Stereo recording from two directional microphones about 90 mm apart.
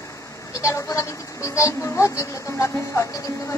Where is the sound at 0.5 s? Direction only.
35° left (ahead or behind).